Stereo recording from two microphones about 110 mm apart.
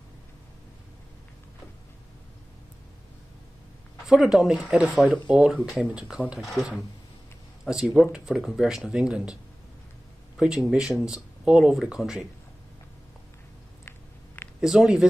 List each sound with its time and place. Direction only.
4.1 s speech: 5° right (ahead or behind)
13.8 s a sound: 20° left (ahead or behind)
14.6 s speech: 5° right (ahead or behind)